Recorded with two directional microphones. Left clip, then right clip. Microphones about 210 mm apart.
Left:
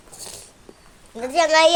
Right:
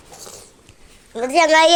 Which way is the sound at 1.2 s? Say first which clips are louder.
Right 3 dB; 35° right (ahead or behind).